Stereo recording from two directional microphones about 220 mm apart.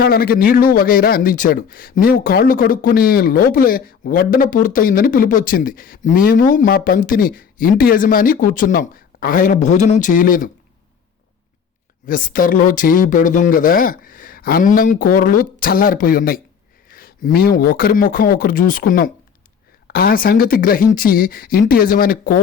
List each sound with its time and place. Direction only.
0.0 s speech: 40° left (ahead or behind)
12.0 s speech: 40° left (ahead or behind)